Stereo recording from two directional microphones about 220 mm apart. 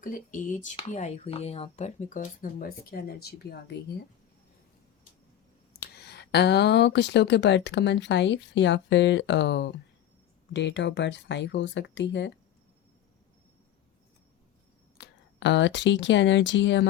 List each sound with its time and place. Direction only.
0.0 s speech: 35° left (ahead or behind)
5.8 s speech: 50° left (ahead or behind)
14.9 s speech: 55° left (ahead or behind)